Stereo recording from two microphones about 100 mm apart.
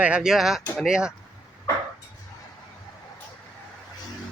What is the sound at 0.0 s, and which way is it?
Speech, 10° right (ahead or behind).